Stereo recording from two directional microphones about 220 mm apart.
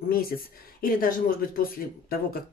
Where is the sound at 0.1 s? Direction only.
40° left (ahead or behind).